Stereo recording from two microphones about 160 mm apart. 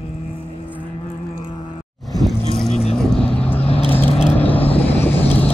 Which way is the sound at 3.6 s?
40° left (ahead or behind).